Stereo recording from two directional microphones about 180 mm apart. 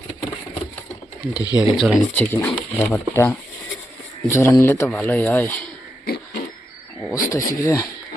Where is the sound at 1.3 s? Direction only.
20° left (ahead or behind).